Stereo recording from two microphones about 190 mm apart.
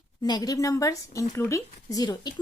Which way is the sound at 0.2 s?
20° left (ahead or behind).